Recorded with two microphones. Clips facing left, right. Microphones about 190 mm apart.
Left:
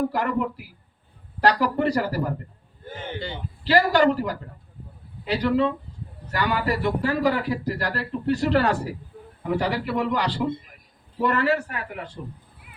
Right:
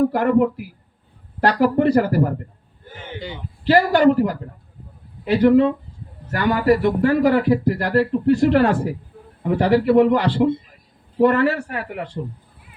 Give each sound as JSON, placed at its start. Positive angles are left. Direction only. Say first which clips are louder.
{"t": 0.1, "sound": "a man's voice", "louder": "right 8 dB", "side_deg": -55}
{"t": 3.2, "sound": "a man's voice", "louder": "right 4 dB", "side_deg": -10}
{"t": 3.6, "sound": "a man's voice", "louder": "right 4 dB", "side_deg": -55}